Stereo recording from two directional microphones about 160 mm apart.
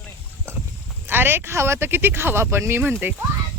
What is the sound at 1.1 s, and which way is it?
Speech, 15° right (ahead or behind).